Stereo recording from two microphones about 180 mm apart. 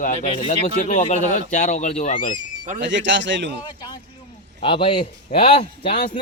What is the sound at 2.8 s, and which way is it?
Speech, 90° right.